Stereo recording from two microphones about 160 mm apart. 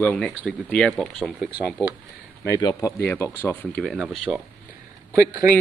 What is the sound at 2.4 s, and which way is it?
A man's voice, 20° left (ahead or behind).